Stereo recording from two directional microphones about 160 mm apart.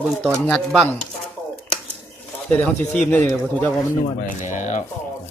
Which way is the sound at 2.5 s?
10° left (ahead or behind).